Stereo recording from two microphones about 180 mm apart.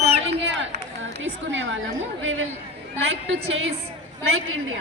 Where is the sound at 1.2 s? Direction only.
90° right.